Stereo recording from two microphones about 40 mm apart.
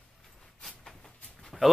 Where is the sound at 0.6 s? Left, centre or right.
Centre.